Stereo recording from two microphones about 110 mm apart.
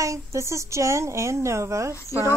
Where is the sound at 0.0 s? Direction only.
25° right (ahead or behind).